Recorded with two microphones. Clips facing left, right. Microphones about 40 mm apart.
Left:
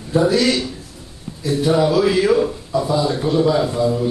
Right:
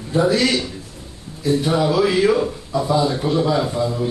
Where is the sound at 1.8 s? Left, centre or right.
Centre.